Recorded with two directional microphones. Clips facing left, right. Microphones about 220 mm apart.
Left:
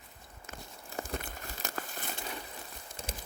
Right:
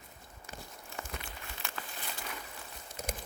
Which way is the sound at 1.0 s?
45° left (ahead or behind).